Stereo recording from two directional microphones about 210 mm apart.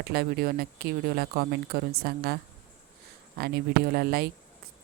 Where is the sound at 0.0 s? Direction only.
50° right (ahead or behind).